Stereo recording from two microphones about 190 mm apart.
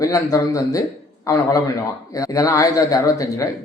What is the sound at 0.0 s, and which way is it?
Speech, 15° left (ahead or behind).